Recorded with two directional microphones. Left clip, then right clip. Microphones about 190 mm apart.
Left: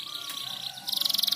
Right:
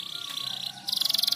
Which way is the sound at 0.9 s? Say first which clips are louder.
Right 1 dB; 25° right (ahead or behind).